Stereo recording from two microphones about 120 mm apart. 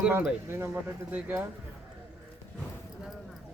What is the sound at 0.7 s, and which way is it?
Speech, 15° right (ahead or behind).